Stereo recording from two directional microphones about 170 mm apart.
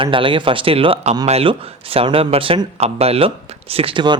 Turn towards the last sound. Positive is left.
turn(degrees=-30)  # may be behind; listen again after turning